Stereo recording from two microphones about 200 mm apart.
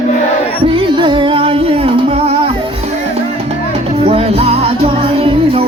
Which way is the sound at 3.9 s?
30° right (ahead or behind).